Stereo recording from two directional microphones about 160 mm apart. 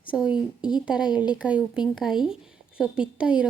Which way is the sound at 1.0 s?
25° left (ahead or behind).